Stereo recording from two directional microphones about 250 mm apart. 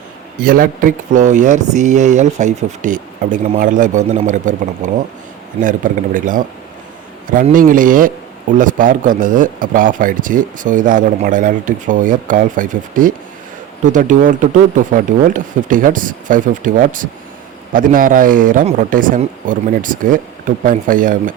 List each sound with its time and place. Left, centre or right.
0.3 s a man's voice: right